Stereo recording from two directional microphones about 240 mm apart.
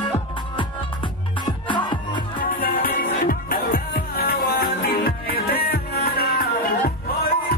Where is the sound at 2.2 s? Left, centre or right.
Left.